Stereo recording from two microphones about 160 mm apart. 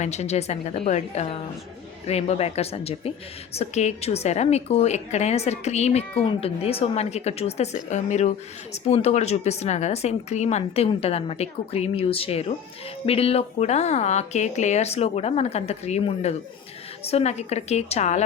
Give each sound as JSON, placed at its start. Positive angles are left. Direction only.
{"t": 0.0, "sound": "a woman's voice", "side_deg": 45}